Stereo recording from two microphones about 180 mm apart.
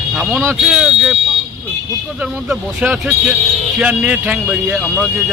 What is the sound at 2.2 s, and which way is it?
Speech, 5° right (ahead or behind).